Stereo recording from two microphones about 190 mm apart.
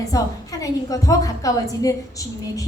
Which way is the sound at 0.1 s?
20° left (ahead or behind).